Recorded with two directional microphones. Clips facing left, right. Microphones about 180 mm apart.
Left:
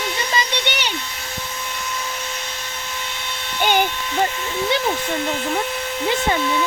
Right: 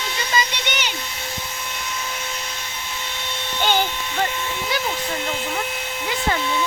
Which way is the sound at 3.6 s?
15° left (ahead or behind).